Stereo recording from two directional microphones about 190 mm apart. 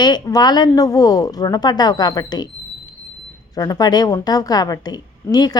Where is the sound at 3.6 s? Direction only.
20° left (ahead or behind).